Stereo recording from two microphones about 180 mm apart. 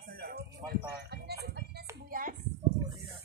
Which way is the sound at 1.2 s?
65° right (ahead or behind).